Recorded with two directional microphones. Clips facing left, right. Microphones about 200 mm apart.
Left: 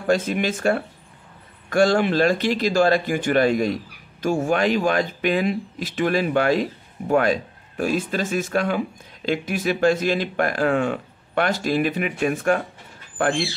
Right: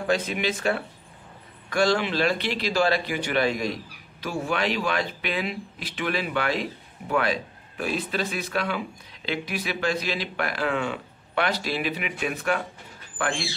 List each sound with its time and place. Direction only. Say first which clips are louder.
0.0 s speech: left 4 dB; 45° left (ahead or behind)